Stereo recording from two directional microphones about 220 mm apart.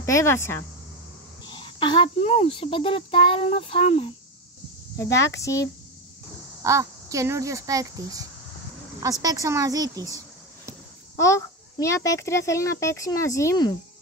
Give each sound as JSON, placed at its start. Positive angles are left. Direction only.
{"t": 0.0, "sound": "a child's voice", "side_deg": 15}
{"t": 1.4, "sound": "a child's voice", "side_deg": 20}
{"t": 4.9, "sound": "a child's voice", "side_deg": 15}
{"t": 6.6, "sound": "speech", "side_deg": -15}
{"t": 11.1, "sound": "a child's voice", "side_deg": 15}